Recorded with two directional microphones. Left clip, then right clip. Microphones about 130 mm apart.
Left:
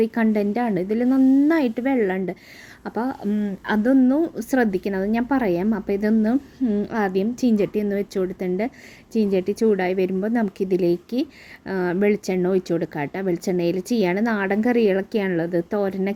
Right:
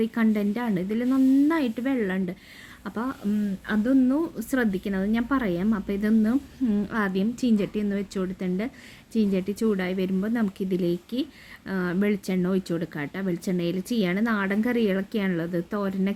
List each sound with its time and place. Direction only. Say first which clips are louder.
0.0 s speech: left 5 dB; 15° left (ahead or behind)